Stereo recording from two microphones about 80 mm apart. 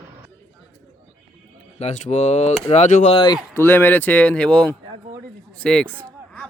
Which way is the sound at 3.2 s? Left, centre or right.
Left.